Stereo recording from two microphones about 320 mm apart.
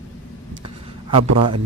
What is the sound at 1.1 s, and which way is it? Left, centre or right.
Speech, centre.